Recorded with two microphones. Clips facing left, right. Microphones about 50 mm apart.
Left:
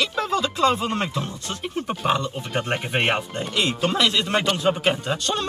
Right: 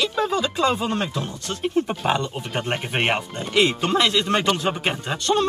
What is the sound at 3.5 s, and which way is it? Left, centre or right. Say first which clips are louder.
Speech: right 5 dB; right.